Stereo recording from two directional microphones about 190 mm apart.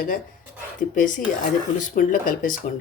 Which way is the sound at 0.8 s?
45° left (ahead or behind).